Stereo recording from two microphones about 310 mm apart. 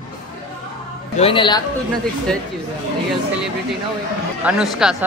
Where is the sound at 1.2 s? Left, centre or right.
Centre.